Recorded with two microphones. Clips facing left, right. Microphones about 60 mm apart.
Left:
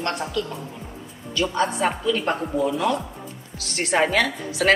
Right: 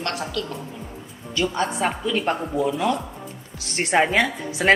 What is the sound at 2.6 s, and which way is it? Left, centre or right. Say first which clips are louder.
Speech: left 1 dB; centre.